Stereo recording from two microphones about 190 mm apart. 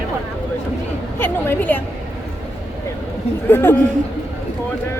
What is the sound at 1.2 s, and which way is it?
Speech, 10° left (ahead or behind).